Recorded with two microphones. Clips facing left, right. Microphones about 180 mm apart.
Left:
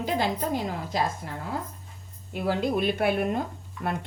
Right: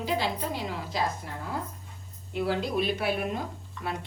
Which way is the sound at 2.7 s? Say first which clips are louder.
Left 3 dB; 50° left (ahead or behind).